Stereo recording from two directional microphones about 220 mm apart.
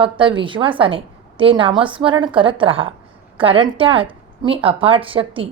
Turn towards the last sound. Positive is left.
turn(degrees=-25)  # may be behind; listen again after turning